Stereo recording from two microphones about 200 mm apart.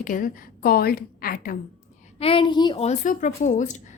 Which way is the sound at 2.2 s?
25° left (ahead or behind).